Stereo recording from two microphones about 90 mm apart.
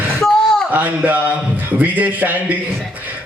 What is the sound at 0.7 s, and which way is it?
A man's voice, 15° right (ahead or behind).